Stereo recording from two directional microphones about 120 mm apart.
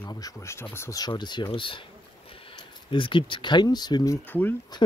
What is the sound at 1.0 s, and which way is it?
Speech, 40° left (ahead or behind).